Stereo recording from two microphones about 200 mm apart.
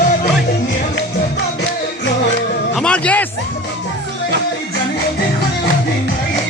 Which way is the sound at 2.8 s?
5° left (ahead or behind).